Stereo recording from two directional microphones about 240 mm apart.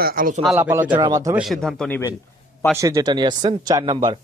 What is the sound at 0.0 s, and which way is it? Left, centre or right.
Speech, right.